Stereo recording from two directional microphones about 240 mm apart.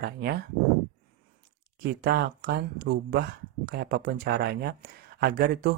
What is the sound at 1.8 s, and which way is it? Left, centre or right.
Speech, right.